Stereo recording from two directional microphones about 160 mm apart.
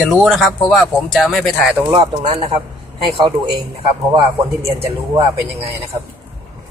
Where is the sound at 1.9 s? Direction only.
30° right (ahead or behind).